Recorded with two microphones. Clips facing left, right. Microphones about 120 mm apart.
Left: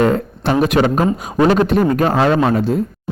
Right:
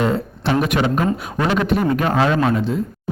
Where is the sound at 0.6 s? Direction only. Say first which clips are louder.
Left 6 dB; 40° left (ahead or behind).